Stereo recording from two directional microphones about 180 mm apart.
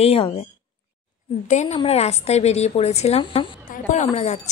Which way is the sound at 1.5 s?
40° left (ahead or behind).